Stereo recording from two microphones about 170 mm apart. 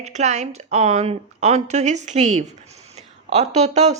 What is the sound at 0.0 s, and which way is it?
Speech, 40° right (ahead or behind).